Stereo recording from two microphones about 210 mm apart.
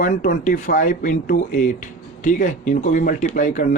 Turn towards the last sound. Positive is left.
turn(degrees=40)  # may be behind; listen again after turning